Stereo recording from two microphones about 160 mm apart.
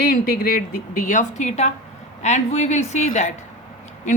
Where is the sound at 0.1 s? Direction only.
60° left (ahead or behind).